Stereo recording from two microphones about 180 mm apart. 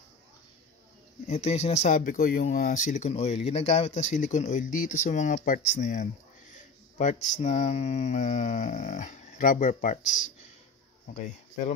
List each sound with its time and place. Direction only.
1.2 s mantra: 35° left (ahead or behind); by 2.4 s 55° left (ahead or behind)
2.4 s speech: 50° left (ahead or behind)
7.0 s mantra: 40° left (ahead or behind)